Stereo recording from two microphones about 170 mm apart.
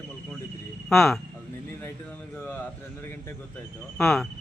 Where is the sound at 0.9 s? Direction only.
Centre (ahead or behind).